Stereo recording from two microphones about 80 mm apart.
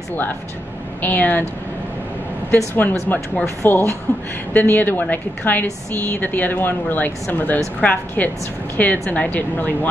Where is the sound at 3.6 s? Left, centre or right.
Left.